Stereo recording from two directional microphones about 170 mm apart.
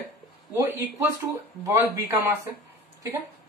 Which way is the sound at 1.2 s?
20° right (ahead or behind).